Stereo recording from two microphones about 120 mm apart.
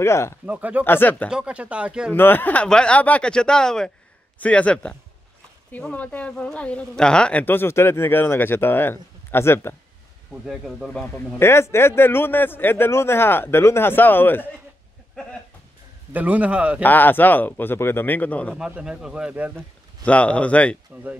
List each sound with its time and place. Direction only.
0.0 s a man's voice: 25° left (ahead or behind)
0.5 s speech: 15° right (ahead or behind)
0.8 s speech: 15° left (ahead or behind)
1.3 s speech: 10° right (ahead or behind)
2.1 s speech: 15° left (ahead or behind)
10.4 s speech: 5° right (ahead or behind)
10.9 s a man's voice: 10° left (ahead or behind)
16.1 s speech: 15° right (ahead or behind)
16.8 s speech: 15° left (ahead or behind)
18.7 s speech: 5° right (ahead or behind)
20.0 s speech: 10° left (ahead or behind)
20.9 s speech: 10° right (ahead or behind)